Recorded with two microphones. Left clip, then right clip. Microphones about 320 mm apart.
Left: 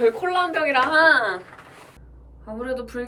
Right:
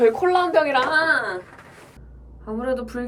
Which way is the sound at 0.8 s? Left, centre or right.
Centre.